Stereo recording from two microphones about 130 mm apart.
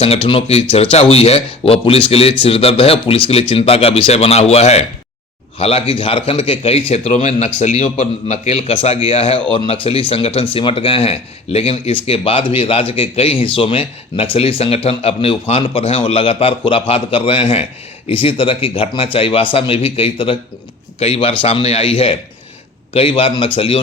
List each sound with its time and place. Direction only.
0.0 s speech: 45° left (ahead or behind)
7.1 s speech: 90° left
7.3 s a man's voice: 55° left (ahead or behind)